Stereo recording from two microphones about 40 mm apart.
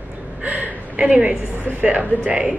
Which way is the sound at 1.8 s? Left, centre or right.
Right.